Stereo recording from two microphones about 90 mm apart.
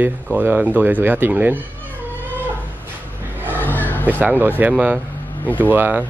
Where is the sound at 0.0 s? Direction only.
20° right (ahead or behind).